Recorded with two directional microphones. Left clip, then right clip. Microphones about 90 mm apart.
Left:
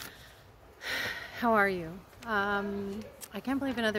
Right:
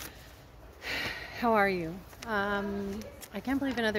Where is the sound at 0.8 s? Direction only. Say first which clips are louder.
Even; 50° left (ahead or behind).